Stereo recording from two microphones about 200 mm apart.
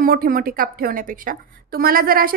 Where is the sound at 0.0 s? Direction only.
45° right (ahead or behind).